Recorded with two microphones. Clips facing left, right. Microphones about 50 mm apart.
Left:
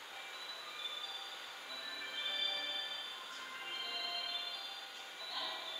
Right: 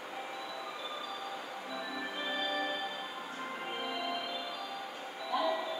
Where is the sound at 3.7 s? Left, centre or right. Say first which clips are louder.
Right 7 dB; right.